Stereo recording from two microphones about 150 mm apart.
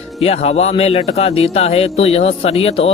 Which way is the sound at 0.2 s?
40° left (ahead or behind).